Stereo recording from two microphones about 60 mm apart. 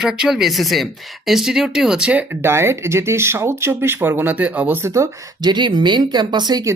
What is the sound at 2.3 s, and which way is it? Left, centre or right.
Speech, right.